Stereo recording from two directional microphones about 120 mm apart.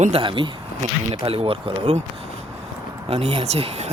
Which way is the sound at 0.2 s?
45° right (ahead or behind).